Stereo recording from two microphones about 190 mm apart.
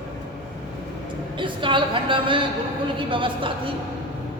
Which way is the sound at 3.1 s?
25° right (ahead or behind).